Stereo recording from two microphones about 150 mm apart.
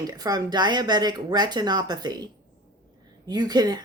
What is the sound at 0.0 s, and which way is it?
Speech, 25° right (ahead or behind).